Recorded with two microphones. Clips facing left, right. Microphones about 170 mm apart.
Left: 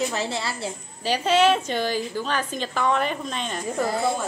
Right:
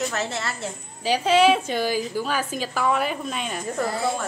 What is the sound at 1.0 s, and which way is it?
A woman's voice, 5° right (ahead or behind).